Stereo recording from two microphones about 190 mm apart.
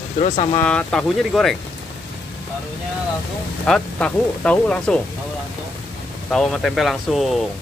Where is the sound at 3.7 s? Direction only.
5° left (ahead or behind).